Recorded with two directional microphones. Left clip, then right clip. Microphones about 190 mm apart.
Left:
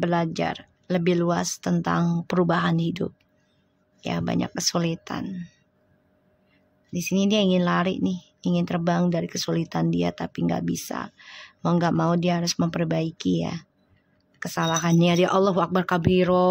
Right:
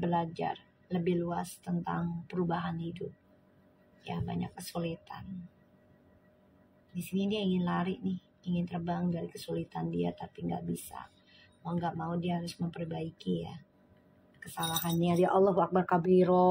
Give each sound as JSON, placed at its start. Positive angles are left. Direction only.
{"t": 0.0, "sound": "speech", "side_deg": 40}
{"t": 4.0, "sound": "speech", "side_deg": 45}
{"t": 6.9, "sound": "speech", "side_deg": 45}
{"t": 15.2, "sound": "speech", "side_deg": 55}